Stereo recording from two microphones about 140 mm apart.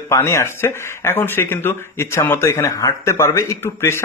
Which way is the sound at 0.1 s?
20° left (ahead or behind).